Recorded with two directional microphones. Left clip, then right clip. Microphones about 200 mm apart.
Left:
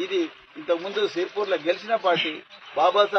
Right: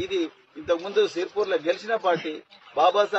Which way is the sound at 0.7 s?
15° right (ahead or behind).